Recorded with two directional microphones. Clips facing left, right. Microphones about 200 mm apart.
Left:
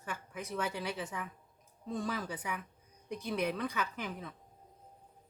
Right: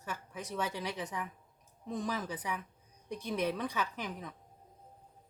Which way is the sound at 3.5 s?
15° right (ahead or behind).